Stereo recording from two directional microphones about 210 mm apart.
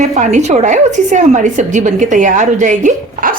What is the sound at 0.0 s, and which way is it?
A woman's voice, 35° right (ahead or behind).